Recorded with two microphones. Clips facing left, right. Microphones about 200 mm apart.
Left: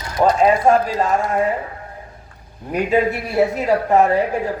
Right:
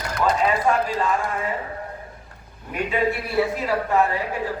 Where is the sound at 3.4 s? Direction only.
45° left (ahead or behind).